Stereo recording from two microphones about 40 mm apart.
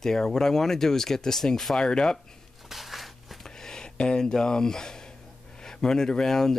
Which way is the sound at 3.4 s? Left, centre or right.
Centre.